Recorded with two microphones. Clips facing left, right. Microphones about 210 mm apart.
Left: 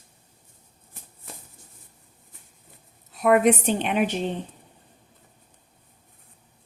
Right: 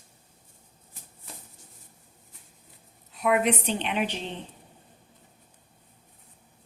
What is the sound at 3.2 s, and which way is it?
A woman's voice, 45° left (ahead or behind).